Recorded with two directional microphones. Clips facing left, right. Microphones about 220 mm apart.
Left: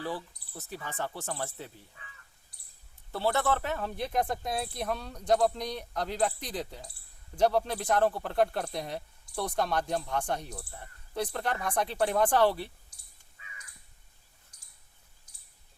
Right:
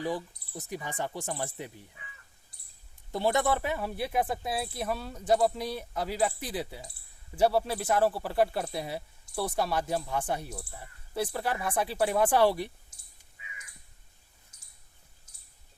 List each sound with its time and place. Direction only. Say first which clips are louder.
0.0 s speech: right 3 dB; 15° right (ahead or behind)
3.1 s speech: right 2 dB; 15° right (ahead or behind)
13.4 s crow: right 2 dB; 15° right (ahead or behind)
14.5 s a sound: right 1 dB; 25° right (ahead or behind)